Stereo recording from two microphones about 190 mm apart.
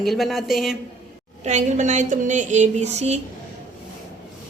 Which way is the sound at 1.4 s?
40° right (ahead or behind).